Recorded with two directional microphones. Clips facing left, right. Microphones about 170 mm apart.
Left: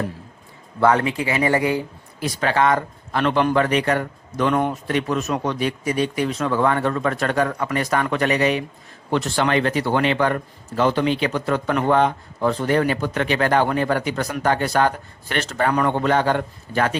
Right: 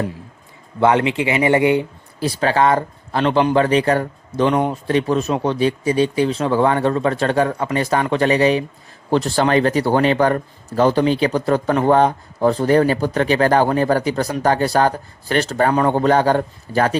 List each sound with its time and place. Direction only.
0.8 s speech: 20° right (ahead or behind)